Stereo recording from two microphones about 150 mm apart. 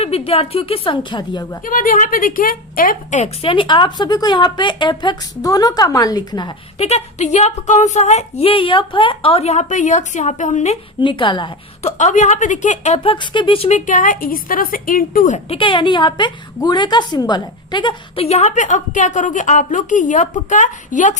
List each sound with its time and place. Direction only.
0.0 s a woman's voice: 40° left (ahead or behind)
1.6 s a woman's voice: 65° left (ahead or behind); by 6.5 s 25° left (ahead or behind)
6.7 s speech: 45° left (ahead or behind)
11.0 s a woman's voice: 35° left (ahead or behind)
11.8 s a woman's voice: 50° left (ahead or behind)
15.4 s a woman's voice: 35° left (ahead or behind)
18.3 s a woman's voice: 50° left (ahead or behind)